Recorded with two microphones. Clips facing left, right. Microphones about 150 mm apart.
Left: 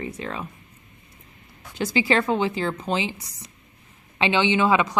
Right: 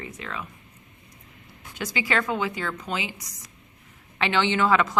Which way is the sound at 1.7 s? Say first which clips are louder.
Left 5 dB; 30° left (ahead or behind).